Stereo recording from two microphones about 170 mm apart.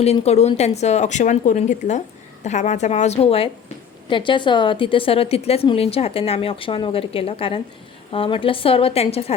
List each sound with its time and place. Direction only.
0.0 s speech: 40° left (ahead or behind)